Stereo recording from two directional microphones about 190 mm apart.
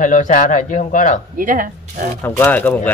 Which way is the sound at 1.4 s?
45° right (ahead or behind).